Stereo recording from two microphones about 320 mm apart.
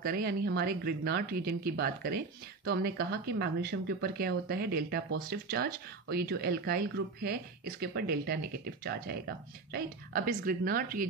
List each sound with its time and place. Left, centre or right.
0.0 s speech: right